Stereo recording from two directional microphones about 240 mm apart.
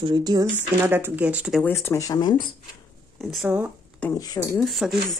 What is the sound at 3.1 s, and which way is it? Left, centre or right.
Speech, centre.